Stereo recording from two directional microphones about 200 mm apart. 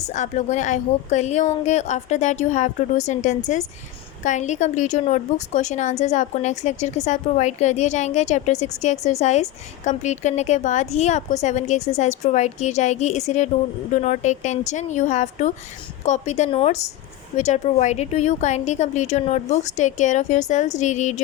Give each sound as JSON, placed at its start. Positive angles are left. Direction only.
{"t": 0.1, "sound": "a woman's voice", "side_deg": 35}